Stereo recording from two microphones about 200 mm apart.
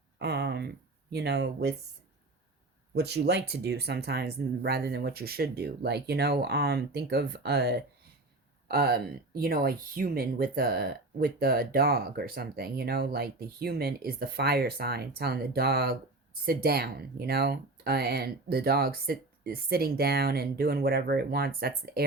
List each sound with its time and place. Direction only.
0.2 s speech: 55° right (ahead or behind)
2.9 s speech: 55° right (ahead or behind)